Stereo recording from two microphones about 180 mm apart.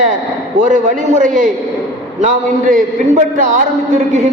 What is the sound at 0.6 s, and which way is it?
A man's voice, 45° right (ahead or behind).